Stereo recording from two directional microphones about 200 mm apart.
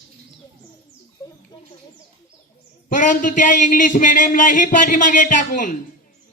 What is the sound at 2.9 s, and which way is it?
A man's voice, 40° left (ahead or behind).